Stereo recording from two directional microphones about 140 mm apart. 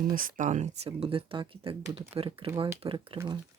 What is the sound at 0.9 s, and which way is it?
Speech, 40° right (ahead or behind).